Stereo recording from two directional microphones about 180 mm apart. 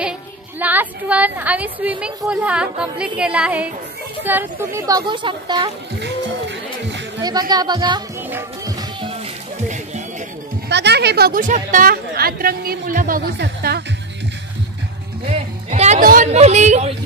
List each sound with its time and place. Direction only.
0.6 s a woman's voice: 10° right (ahead or behind); by 5.7 s 25° right (ahead or behind)
6.5 s music: 80° right
7.2 s speech: 20° right (ahead or behind)
8.2 s music: 10° right (ahead or behind)
9.2 s music: 40° right (ahead or behind)
10.7 s speech: 70° right (ahead or behind)
15.2 s music: 40° right (ahead or behind)
16.3 s a woman's voice: 35° right (ahead or behind)